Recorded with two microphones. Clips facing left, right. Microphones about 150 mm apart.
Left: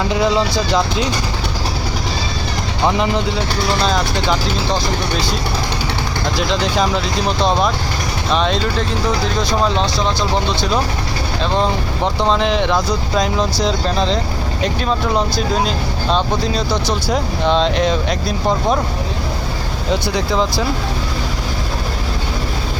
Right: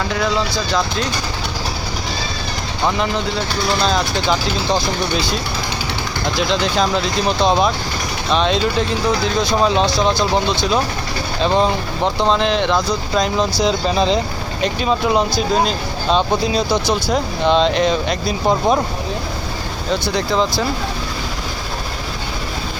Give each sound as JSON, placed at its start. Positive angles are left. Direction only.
{"t": 0.1, "sound": "speech", "side_deg": 20}
{"t": 3.8, "sound": "speech", "side_deg": 0}
{"t": 6.5, "sound": "speech", "side_deg": 5}
{"t": 11.5, "sound": "speech", "side_deg": 0}
{"t": 20.1, "sound": "speech", "side_deg": 5}